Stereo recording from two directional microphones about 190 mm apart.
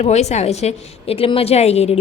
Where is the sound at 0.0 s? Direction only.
35° left (ahead or behind).